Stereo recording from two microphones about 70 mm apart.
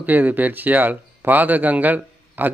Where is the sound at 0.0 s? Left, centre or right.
Right.